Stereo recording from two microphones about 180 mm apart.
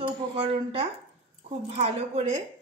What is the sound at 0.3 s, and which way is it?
Speech, 30° right (ahead or behind).